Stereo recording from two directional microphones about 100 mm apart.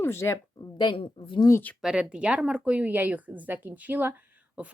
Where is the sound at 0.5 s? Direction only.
45° left (ahead or behind).